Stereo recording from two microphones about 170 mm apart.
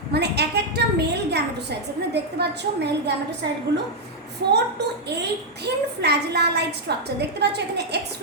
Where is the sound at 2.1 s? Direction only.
80° right.